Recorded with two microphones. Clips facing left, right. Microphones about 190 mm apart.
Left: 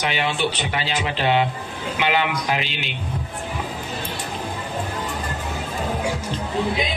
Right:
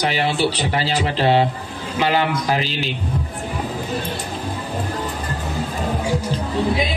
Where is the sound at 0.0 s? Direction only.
35° right (ahead or behind).